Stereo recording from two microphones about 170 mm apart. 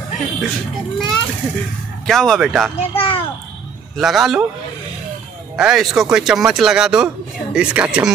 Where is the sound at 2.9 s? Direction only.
35° left (ahead or behind).